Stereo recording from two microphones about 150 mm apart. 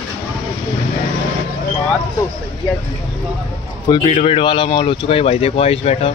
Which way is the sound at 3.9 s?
40° left (ahead or behind).